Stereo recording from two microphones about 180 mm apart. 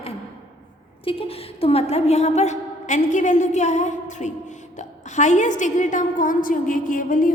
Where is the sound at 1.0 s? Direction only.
30° left (ahead or behind).